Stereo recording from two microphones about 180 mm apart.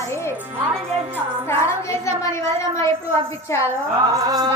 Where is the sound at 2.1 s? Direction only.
15° left (ahead or behind).